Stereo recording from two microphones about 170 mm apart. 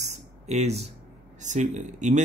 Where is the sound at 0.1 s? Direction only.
40° right (ahead or behind).